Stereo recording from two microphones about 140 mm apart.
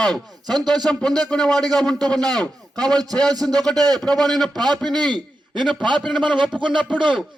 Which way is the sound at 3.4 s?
5° left (ahead or behind).